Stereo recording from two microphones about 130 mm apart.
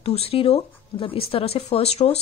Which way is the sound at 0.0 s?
50° left (ahead or behind).